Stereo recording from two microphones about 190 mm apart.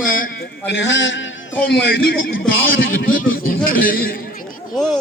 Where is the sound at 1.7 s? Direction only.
60° left (ahead or behind).